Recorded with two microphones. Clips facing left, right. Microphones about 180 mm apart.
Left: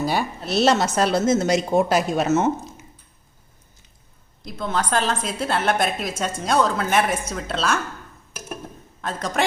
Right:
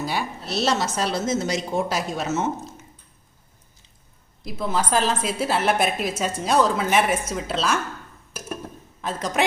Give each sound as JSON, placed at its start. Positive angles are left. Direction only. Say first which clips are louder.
{"t": 0.1, "sound": "speech", "louder": "left 4 dB", "side_deg": 50}
{"t": 4.4, "sound": "a woman's voice", "louder": "even", "side_deg": -5}
{"t": 9.0, "sound": "a woman's voice", "louder": "even", "side_deg": 0}